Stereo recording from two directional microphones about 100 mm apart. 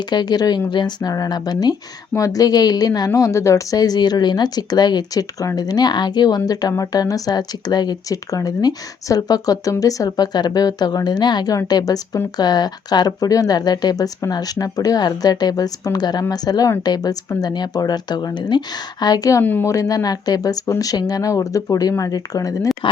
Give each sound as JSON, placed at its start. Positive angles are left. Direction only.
{"t": 0.0, "sound": "speech", "side_deg": 45}
{"t": 19.4, "sound": "a woman's voice", "side_deg": 20}
{"t": 19.6, "sound": "speech", "side_deg": 35}